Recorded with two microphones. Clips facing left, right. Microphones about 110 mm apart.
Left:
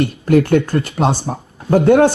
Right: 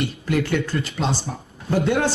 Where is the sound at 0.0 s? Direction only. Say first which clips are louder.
Left 9 dB; 50° left (ahead or behind).